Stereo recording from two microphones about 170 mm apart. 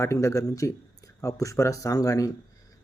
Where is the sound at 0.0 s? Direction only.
15° left (ahead or behind).